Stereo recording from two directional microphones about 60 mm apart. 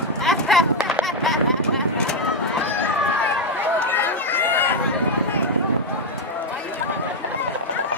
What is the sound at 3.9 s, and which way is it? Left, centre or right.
Run, left.